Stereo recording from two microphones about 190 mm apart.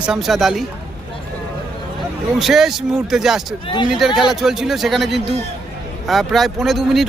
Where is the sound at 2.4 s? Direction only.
Centre (ahead or behind).